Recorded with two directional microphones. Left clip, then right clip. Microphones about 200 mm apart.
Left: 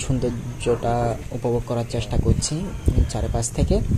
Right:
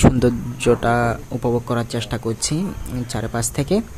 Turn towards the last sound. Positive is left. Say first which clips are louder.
# right 3 dB
turn(degrees=-25)  # may be behind; listen again after turning